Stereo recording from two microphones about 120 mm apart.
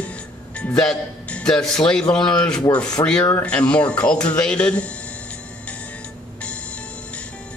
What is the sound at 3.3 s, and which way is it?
Speech, 10° left (ahead or behind).